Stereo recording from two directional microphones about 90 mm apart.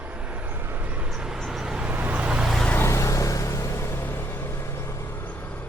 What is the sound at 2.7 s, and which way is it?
Vehicle, 30° left (ahead or behind).